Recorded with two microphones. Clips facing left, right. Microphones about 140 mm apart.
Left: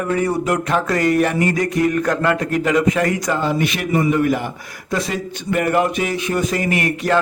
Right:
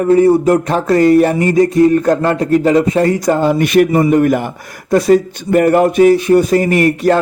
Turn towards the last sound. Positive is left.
turn(degrees=-40)  # may be behind; listen again after turning